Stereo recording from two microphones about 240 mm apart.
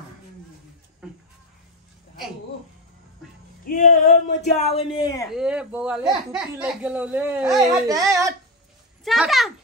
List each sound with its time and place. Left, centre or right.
3.6 s a sound: left
4.6 s speech: left
5.3 s speech: centre